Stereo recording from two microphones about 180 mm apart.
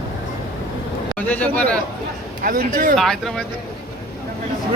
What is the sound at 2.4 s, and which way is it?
Speech, 50° right (ahead or behind).